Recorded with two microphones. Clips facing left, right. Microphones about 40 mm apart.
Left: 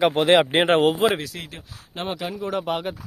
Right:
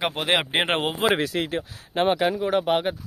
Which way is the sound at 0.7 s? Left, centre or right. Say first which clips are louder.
Left 7 dB; centre.